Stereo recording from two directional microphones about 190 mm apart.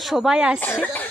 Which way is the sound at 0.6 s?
10° left (ahead or behind).